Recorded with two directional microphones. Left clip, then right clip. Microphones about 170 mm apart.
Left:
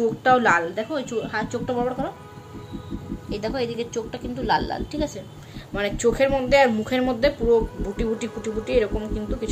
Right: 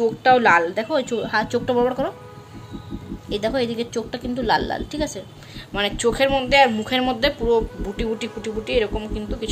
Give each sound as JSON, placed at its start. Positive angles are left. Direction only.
{"t": 0.2, "sound": "a woman's voice", "side_deg": -20}
{"t": 0.7, "sound": "a woman's voice", "side_deg": -40}
{"t": 3.3, "sound": "a woman's voice", "side_deg": -45}
{"t": 5.7, "sound": "speech", "side_deg": 0}